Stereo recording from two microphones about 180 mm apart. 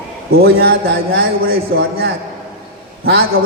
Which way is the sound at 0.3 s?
60° right (ahead or behind).